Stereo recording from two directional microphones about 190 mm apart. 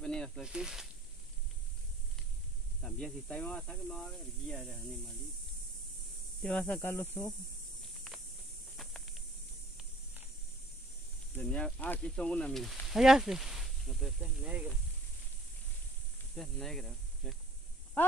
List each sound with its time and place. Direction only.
0.0 s snake: 5° left (ahead or behind)
2.8 s speech: 5° left (ahead or behind)
6.4 s speech: 5° left (ahead or behind)
8.7 s snake: centre (ahead or behind)
11.3 s speech: 5° left (ahead or behind)
16.3 s speech: centre (ahead or behind)